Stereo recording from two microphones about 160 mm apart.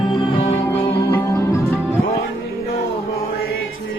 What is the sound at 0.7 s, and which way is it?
Music, 15° left (ahead or behind).